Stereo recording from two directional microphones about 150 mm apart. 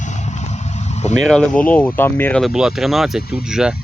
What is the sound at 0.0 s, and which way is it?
Vehicle, 50° left (ahead or behind).